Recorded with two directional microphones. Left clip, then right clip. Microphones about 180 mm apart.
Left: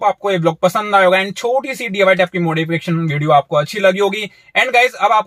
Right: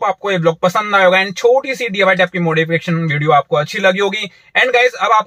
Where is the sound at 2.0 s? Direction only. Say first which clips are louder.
Even; 10° left (ahead or behind).